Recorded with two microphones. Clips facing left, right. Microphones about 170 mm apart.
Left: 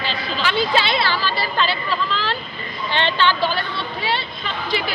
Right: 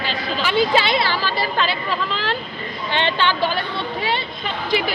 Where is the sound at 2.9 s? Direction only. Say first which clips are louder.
Left 1 dB; 15° right (ahead or behind).